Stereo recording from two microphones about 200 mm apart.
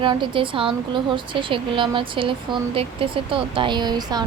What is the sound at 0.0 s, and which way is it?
Speech, 25° right (ahead or behind).